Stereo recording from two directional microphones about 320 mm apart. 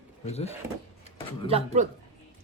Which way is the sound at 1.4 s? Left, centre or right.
Centre.